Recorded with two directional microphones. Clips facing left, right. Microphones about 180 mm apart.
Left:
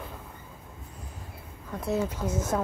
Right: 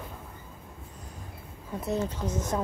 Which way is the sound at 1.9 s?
5° left (ahead or behind).